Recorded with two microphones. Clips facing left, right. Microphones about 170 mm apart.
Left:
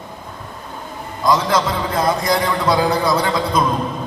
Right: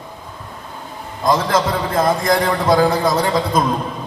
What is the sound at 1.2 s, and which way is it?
A man's voice, 50° right (ahead or behind).